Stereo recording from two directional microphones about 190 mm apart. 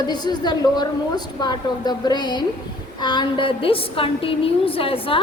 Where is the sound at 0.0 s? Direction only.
20° left (ahead or behind).